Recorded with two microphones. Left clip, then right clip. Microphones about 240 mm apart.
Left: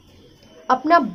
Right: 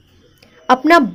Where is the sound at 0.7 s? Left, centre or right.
Right.